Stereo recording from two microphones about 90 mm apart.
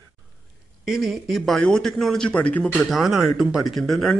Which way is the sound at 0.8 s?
5° right (ahead or behind).